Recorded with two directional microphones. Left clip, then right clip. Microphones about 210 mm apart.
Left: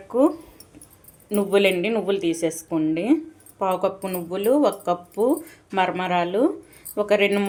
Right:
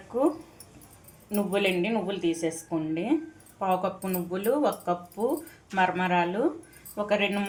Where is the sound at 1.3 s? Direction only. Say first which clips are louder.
Left 7 dB; 45° left (ahead or behind).